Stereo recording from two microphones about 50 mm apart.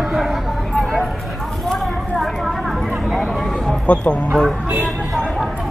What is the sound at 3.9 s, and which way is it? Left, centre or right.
Speech, left.